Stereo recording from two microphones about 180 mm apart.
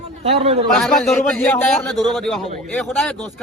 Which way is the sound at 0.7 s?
Centre (ahead or behind).